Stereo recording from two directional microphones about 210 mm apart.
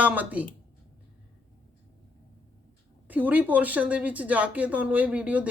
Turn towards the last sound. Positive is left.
turn(degrees=-5)  # may be behind; listen again after turning